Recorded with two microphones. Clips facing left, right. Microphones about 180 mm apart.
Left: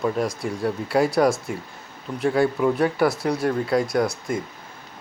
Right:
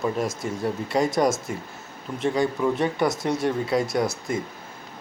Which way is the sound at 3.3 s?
20° right (ahead or behind).